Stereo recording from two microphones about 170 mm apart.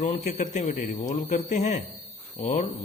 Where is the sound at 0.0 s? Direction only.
45° left (ahead or behind).